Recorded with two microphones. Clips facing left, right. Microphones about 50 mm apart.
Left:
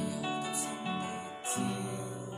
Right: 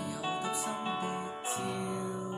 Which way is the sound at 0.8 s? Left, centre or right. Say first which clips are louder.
Right 2 dB; centre.